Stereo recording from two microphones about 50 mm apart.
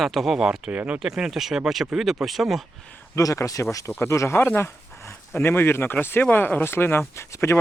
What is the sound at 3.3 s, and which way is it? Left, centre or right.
Speech, left.